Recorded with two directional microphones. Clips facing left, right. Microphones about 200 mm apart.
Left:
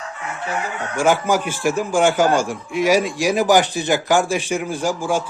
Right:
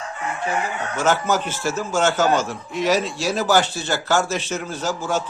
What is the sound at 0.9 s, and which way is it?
A man's voice, 10° left (ahead or behind).